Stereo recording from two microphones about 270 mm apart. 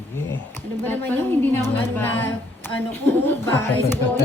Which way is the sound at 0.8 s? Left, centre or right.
Centre.